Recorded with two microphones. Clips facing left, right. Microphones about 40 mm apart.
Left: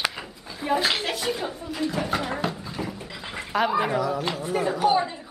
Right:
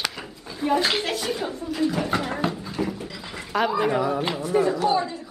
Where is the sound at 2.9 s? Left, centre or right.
Centre.